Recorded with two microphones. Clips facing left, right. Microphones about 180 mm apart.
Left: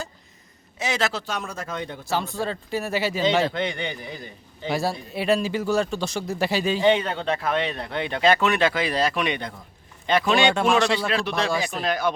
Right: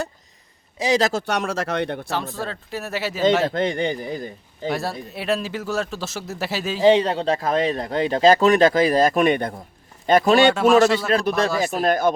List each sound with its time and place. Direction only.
0.8 s speech: 35° right (ahead or behind)
1.2 s speech: 80° right
2.0 s a man's voice: centre (ahead or behind)
3.5 s a man's voice: 45° right (ahead or behind)
4.7 s a man's voice: centre (ahead or behind)
6.8 s a man's voice: 30° right (ahead or behind)
10.4 s a man's voice: 5° right (ahead or behind)
11.1 s a man's voice: 45° right (ahead or behind)